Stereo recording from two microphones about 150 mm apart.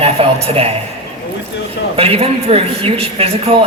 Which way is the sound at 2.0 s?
40° right (ahead or behind).